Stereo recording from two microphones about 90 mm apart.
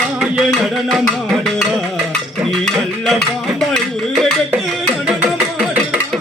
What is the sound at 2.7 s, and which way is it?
Music, centre (ahead or behind).